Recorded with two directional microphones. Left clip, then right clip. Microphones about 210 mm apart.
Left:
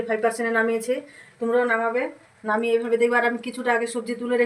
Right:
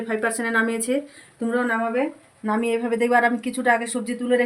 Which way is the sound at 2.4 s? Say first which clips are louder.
Left 1 dB; 40° right (ahead or behind).